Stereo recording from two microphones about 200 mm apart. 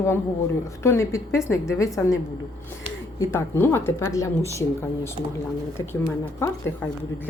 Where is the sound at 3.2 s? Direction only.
15° left (ahead or behind).